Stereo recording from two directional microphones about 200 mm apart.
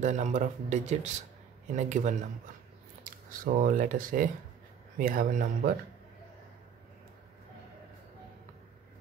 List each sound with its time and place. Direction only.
0.0 s speech: 35° right (ahead or behind)
3.3 s speech: 40° right (ahead or behind)